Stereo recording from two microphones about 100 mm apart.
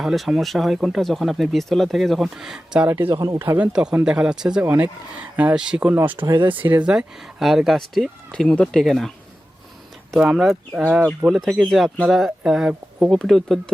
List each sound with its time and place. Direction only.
0.0 s speech: centre (ahead or behind)
2.8 s speech: 20° right (ahead or behind)
3.1 s speech: 45° right (ahead or behind)
3.6 s speech: 10° right (ahead or behind)
4.6 s speech: 20° right (ahead or behind)
6.2 s speech: 60° right (ahead or behind)
6.6 s speech: 15° right (ahead or behind); by 9.1 s centre (ahead or behind)
10.2 s speech: 5° right (ahead or behind)
11.3 s speech: centre (ahead or behind)